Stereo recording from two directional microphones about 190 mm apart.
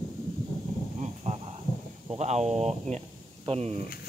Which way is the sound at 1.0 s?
35° right (ahead or behind).